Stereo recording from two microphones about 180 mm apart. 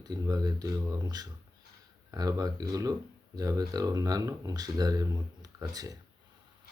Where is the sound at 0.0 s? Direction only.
20° right (ahead or behind).